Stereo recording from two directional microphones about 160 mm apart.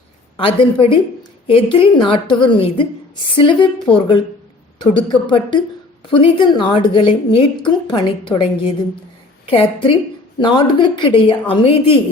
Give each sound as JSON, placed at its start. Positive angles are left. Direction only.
{"t": 0.3, "sound": "a woman's voice", "side_deg": 35}